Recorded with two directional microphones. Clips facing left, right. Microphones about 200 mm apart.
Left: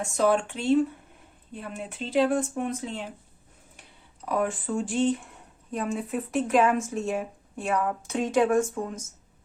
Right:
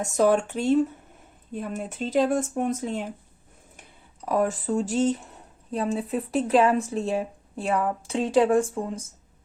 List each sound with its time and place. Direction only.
0.0 s speech: 45° right (ahead or behind)
4.3 s speech: 40° right (ahead or behind)